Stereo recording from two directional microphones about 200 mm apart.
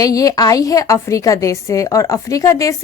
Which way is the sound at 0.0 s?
15° left (ahead or behind).